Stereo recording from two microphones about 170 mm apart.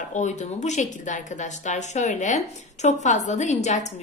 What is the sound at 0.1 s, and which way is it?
A woman's voice, 45° left (ahead or behind).